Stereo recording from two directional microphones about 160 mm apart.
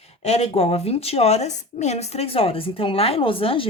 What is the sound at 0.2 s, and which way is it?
Speech, 40° left (ahead or behind).